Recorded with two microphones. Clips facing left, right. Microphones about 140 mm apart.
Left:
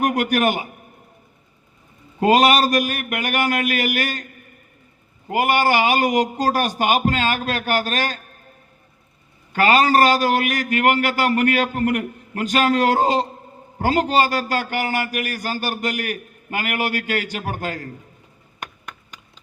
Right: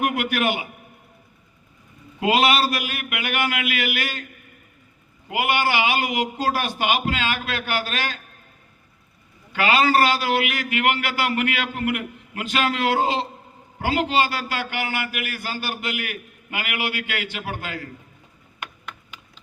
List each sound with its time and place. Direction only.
0.0 s a man's voice: 40° left (ahead or behind)
2.2 s a man's voice: 45° left (ahead or behind)
5.3 s a man's voice: 45° left (ahead or behind)
9.5 s a man's voice: 45° left (ahead or behind)